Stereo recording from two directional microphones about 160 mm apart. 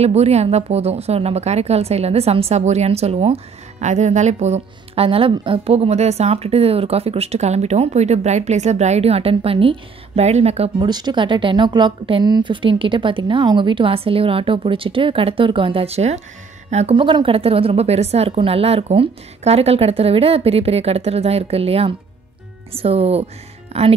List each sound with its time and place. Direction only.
0.0 s a woman's voice: 40° right (ahead or behind)
10.8 s a woman's voice: 25° right (ahead or behind)